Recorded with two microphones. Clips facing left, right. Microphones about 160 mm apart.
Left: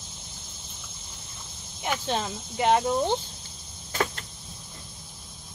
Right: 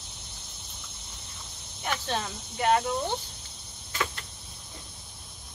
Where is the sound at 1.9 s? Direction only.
15° left (ahead or behind).